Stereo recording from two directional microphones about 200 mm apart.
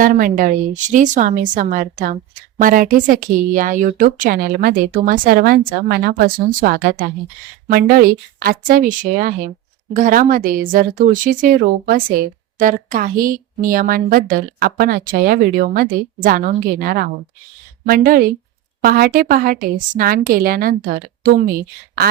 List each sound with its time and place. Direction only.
0.0 s a woman's voice: 45° right (ahead or behind)